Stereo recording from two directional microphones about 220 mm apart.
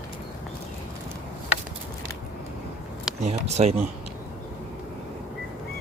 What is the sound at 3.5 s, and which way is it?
Speech, 30° right (ahead or behind).